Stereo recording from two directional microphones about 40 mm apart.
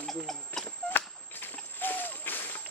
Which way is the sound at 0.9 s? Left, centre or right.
Left.